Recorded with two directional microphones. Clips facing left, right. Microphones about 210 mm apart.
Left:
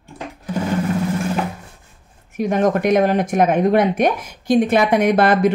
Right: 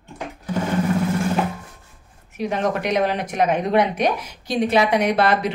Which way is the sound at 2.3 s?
50° left (ahead or behind).